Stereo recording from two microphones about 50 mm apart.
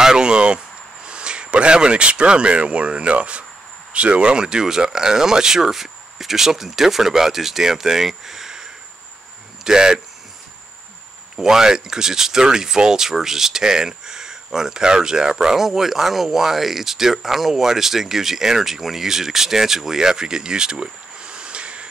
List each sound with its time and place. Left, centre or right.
0.0 s a sound: centre
1.0 s speech: centre
9.7 s speech: centre
11.3 s speech: centre